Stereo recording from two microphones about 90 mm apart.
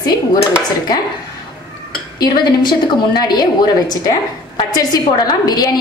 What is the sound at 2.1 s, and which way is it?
A woman's voice, 50° left (ahead or behind).